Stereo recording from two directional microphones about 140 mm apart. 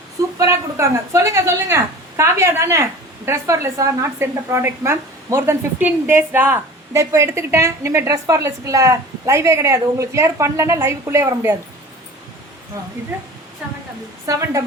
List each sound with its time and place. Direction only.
0.3 s a woman's voice: 20° right (ahead or behind)
14.3 s a woman's voice: 25° right (ahead or behind)